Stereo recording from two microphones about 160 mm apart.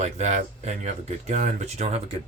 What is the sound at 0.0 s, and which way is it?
Speech, 45° right (ahead or behind).